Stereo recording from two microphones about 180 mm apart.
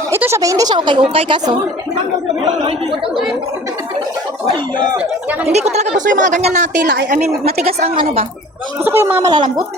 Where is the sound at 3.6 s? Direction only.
15° right (ahead or behind).